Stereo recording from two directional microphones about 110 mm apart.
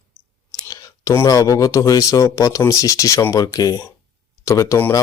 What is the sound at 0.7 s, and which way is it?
Speech, 30° left (ahead or behind).